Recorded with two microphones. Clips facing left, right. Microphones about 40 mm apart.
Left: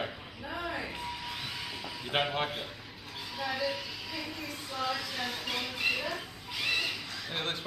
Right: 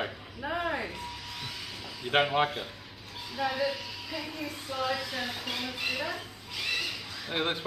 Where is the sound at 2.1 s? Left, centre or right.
Centre.